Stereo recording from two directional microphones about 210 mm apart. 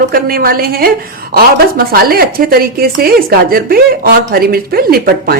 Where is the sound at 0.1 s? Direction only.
45° right (ahead or behind).